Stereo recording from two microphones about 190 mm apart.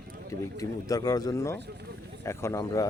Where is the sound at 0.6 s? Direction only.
20° left (ahead or behind).